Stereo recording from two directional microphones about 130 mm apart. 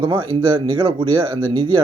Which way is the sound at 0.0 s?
40° right (ahead or behind).